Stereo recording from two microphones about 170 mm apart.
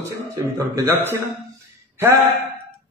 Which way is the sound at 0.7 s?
15° right (ahead or behind).